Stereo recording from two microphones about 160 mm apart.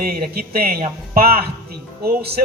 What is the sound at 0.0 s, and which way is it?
A man's voice, 70° right (ahead or behind).